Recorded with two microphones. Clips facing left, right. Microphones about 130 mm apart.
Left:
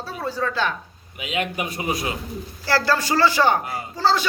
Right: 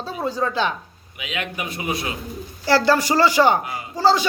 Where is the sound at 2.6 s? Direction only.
20° right (ahead or behind).